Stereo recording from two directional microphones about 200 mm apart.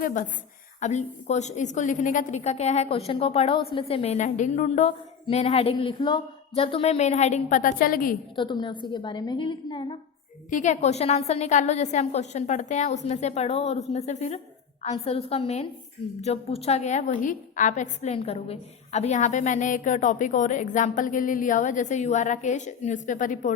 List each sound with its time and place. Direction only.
0.0 s a woman's voice: 40° left (ahead or behind)
8.4 s a woman's voice: 25° left (ahead or behind)
10.5 s a woman's voice: 35° left (ahead or behind)